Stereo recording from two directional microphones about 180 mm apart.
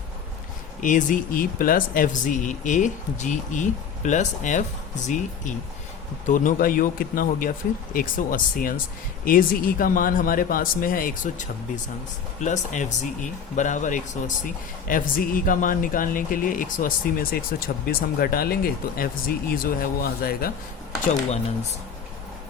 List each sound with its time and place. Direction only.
0.8 s speech: 45° left (ahead or behind)
21.1 s speech: 40° left (ahead or behind)